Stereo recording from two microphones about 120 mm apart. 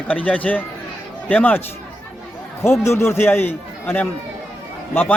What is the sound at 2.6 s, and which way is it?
A man's voice, 20° left (ahead or behind).